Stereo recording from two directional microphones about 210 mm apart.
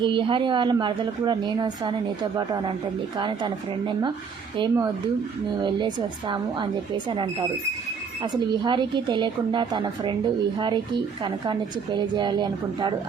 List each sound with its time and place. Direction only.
0.0 s a woman's voice: 25° right (ahead or behind)
8.2 s a woman's voice: 20° right (ahead or behind)